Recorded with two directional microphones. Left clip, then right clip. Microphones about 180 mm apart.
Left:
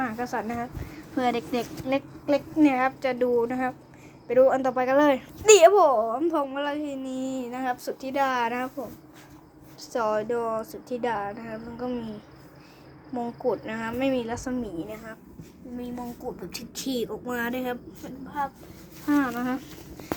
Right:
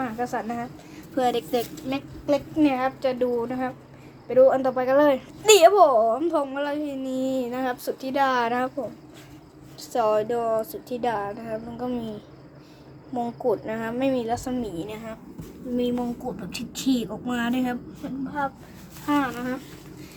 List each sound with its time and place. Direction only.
0.0 s a child's voice: 20° left (ahead or behind); by 8.7 s 5° right (ahead or behind)
9.9 s a child's voice: 5° right (ahead or behind)
13.1 s a child's voice: centre (ahead or behind)
16.5 s a child's voice: 10° left (ahead or behind)